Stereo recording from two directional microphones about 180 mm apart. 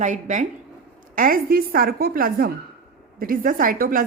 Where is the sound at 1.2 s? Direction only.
55° right (ahead or behind).